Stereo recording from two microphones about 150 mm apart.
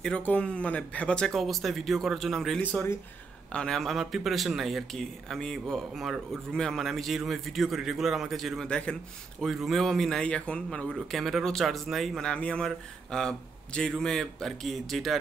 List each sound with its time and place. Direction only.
0.0 s speech: 5° left (ahead or behind)
2.6 s speech: 15° left (ahead or behind)
3.5 s speech: 5° left (ahead or behind)